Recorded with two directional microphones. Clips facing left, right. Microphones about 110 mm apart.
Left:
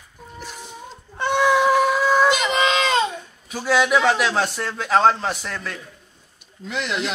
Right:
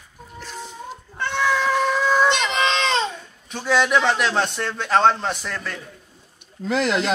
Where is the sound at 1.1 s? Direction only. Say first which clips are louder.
Left 4 dB; 15° left (ahead or behind); by 5.8 s centre (ahead or behind).